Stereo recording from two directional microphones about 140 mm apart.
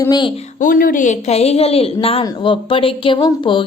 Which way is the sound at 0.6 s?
80° left.